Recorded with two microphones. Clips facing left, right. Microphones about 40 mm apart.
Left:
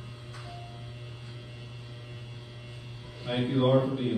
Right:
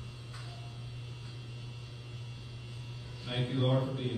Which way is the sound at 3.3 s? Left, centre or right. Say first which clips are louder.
Left 7 dB; left.